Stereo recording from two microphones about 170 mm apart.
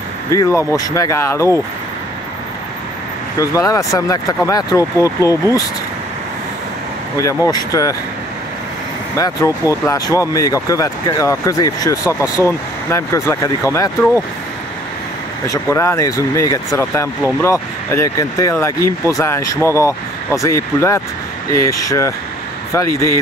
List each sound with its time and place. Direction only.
0.3 s speech: 20° left (ahead or behind)
3.3 s speech: 20° left (ahead or behind)
7.4 s speech: 20° left (ahead or behind)
9.1 s speech: 20° left (ahead or behind)
15.4 s speech: 15° left (ahead or behind)